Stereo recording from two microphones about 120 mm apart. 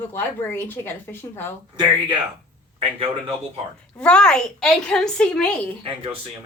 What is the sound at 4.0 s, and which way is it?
A woman's voice, 5° left (ahead or behind).